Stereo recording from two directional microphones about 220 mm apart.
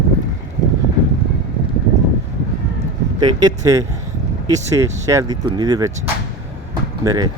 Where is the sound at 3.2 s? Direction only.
20° right (ahead or behind).